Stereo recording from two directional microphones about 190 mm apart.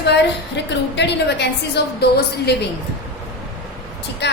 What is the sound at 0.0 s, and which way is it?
A woman's voice, 65° left (ahead or behind).